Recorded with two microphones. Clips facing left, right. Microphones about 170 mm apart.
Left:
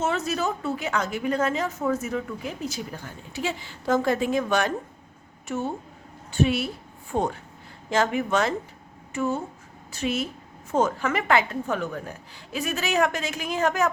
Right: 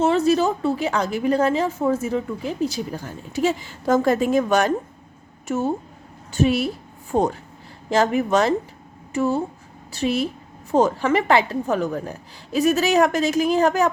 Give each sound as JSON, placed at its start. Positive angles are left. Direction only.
{"t": 0.0, "sound": "a woman's voice", "side_deg": -30}